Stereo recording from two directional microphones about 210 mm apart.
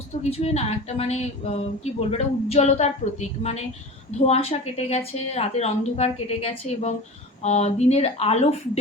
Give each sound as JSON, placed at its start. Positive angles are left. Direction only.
{"t": 0.2, "sound": "a woman's voice", "side_deg": 30}